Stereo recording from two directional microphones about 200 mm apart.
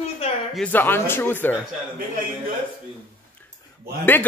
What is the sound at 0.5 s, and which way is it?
Speech, 10° left (ahead or behind).